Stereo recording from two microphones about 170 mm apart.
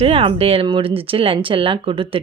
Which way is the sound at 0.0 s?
35° right (ahead or behind).